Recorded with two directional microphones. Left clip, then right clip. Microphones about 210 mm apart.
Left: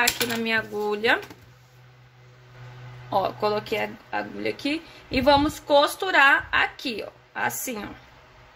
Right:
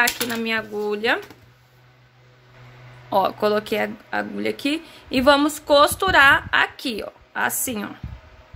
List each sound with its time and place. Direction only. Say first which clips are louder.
0.3 s speech: right 1 dB; 20° right (ahead or behind)
3.1 s speech: right 4 dB; 25° right (ahead or behind)